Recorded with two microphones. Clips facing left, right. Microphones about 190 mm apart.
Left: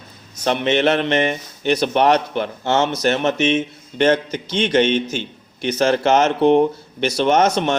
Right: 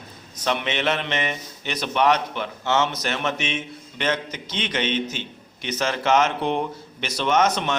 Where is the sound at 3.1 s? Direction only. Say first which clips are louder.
Left 9 dB; 45° left (ahead or behind).